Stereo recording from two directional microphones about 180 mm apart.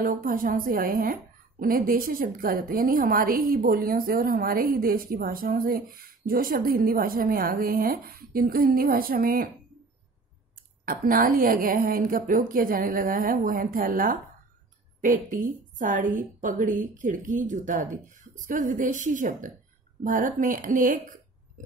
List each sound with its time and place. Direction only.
0.0 s a woman's voice: 50° right (ahead or behind)
10.5 s a woman's voice: 50° right (ahead or behind)